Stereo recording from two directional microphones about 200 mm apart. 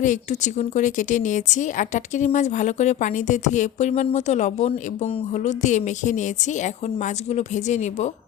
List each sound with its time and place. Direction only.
0.0 s a woman's voice: 40° left (ahead or behind)